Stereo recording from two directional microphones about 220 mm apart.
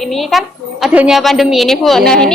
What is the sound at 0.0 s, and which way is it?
A woman's voice, centre (ahead or behind).